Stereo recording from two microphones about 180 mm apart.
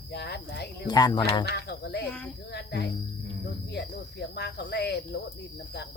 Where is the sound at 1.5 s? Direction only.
65° left (ahead or behind).